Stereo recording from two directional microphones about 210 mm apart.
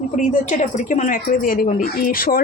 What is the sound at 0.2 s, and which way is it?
Speech, 35° left (ahead or behind).